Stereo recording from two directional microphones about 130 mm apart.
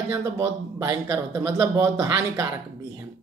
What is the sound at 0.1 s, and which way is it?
Speech, 25° right (ahead or behind).